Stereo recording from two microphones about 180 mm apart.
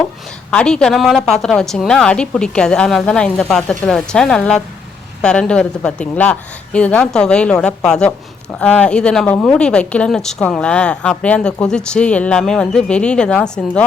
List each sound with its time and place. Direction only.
0.5 s speech: 5° left (ahead or behind)